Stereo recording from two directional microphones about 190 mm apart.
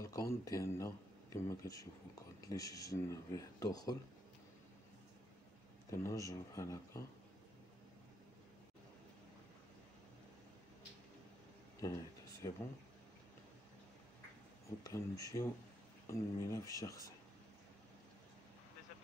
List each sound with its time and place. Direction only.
0.0 s speech: 15° left (ahead or behind)
5.9 s speech: 15° left (ahead or behind)
11.8 s a sound: 15° left (ahead or behind)
14.8 s speech: 20° left (ahead or behind)